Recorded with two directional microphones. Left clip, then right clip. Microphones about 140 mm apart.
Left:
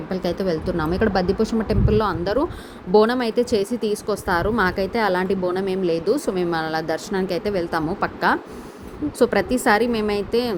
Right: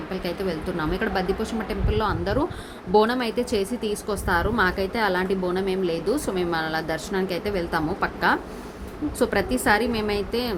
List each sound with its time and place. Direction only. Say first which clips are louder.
0.1 s a woman's voice: left 6 dB; 25° left (ahead or behind)